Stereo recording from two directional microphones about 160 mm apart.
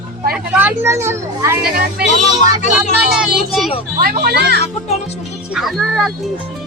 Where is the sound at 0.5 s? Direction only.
15° right (ahead or behind).